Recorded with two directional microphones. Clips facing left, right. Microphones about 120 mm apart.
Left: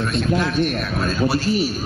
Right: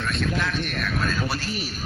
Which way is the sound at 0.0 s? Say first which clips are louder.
Left 6 dB; 20° left (ahead or behind).